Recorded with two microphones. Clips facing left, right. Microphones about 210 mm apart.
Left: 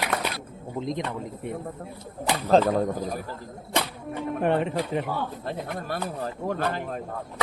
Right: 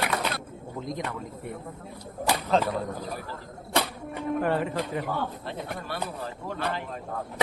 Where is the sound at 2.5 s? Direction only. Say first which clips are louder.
Left 8 dB; 45° left (ahead or behind).